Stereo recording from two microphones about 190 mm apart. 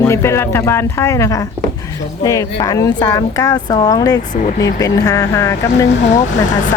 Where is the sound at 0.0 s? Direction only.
15° left (ahead or behind).